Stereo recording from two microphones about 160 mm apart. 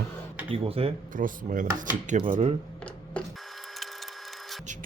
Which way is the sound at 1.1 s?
55° right (ahead or behind).